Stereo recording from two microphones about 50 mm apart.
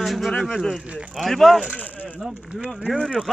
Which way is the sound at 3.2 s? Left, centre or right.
Centre.